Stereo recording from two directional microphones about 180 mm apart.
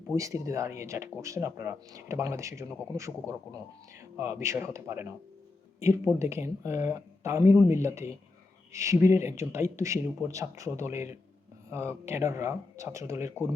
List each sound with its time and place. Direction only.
0.1 s speech: 15° right (ahead or behind)